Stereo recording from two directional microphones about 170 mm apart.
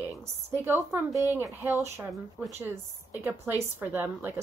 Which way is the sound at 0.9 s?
15° right (ahead or behind).